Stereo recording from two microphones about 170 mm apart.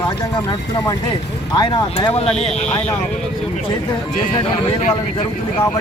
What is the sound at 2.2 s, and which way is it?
Speech, 35° left (ahead or behind).